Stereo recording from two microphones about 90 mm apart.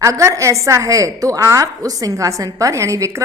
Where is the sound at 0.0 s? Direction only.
35° right (ahead or behind).